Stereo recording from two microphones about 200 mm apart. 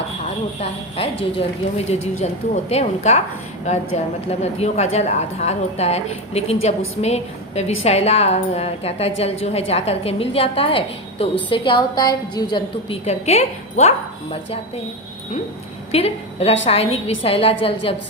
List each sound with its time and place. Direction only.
0.6 s a woman's voice: 30° left (ahead or behind)
15.9 s a woman's voice: 30° left (ahead or behind)